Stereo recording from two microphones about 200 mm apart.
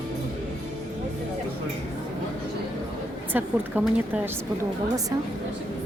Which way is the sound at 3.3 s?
10° right (ahead or behind).